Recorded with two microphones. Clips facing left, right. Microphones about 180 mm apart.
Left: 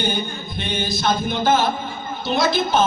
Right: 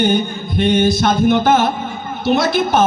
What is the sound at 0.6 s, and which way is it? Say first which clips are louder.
Music: right 11 dB; 65° right (ahead or behind).